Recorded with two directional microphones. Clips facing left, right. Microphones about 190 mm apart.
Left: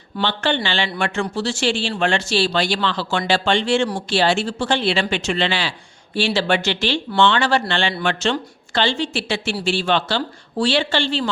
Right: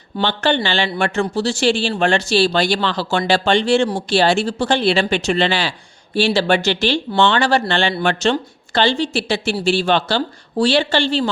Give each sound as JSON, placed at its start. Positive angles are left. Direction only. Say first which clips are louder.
{"t": 0.2, "sound": "speech", "louder": "right 3 dB", "side_deg": -40}